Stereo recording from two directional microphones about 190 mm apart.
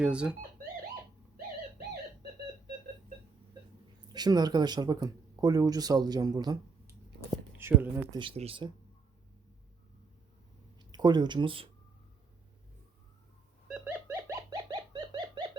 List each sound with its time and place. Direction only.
0.0 s speech: 5° right (ahead or behind)
4.1 s speech: 20° right (ahead or behind)
8.2 s speech: 30° right (ahead or behind)
10.8 s speech: 20° right (ahead or behind)
13.7 s pigeon: 10° right (ahead or behind)